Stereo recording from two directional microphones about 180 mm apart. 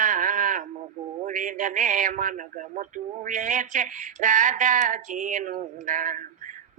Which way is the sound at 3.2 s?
45° right (ahead or behind).